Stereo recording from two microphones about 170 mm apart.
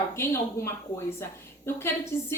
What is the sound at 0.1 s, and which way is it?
A woman's voice, 15° left (ahead or behind).